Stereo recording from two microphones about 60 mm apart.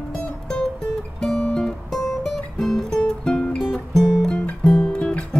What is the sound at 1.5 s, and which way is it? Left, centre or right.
Guitar, centre.